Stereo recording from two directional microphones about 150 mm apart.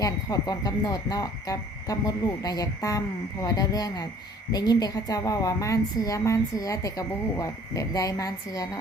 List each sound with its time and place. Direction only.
0.0 s a woman's voice: 25° left (ahead or behind)